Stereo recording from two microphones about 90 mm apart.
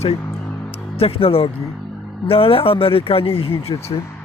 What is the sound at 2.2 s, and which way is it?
Speech, 90° left.